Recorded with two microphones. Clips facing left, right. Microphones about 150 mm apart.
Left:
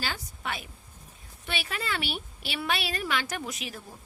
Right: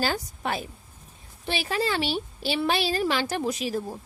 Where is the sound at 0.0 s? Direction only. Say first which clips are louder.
Right 8 dB; 40° right (ahead or behind).